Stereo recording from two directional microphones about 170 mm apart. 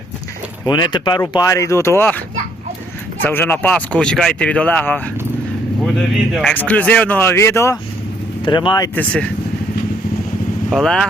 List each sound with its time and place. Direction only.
0.6 s speech: 25° left (ahead or behind)
6.3 s speech: 5° left (ahead or behind)
8.4 s speech: 25° left (ahead or behind)
9.0 s speech: 5° left (ahead or behind)
10.7 s speech: centre (ahead or behind)